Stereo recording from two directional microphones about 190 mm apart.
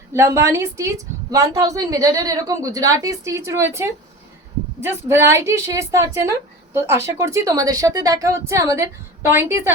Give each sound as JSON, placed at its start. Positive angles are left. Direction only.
{"t": 0.1, "sound": "a woman's voice", "side_deg": -15}